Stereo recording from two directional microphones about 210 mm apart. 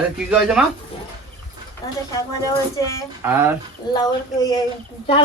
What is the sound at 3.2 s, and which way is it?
Speech, 10° right (ahead or behind).